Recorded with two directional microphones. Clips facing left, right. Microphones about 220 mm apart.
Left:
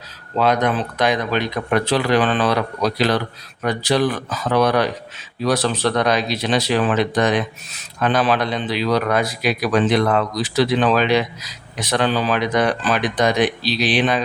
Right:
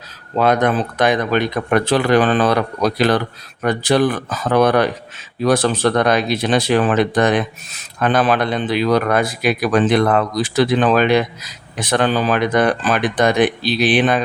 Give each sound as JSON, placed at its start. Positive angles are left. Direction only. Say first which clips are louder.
{"t": 0.3, "sound": "speech", "louder": "right 3 dB", "side_deg": -50}